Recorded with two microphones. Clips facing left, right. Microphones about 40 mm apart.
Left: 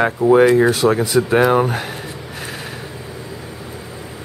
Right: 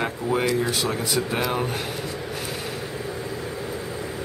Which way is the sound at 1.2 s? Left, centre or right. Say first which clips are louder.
Left 11 dB; left.